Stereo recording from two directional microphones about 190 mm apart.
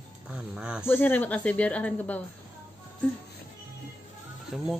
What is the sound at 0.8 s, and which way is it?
A woman's voice, 10° left (ahead or behind).